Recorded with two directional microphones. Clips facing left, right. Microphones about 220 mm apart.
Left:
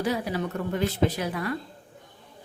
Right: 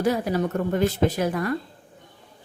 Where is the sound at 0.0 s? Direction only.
45° right (ahead or behind).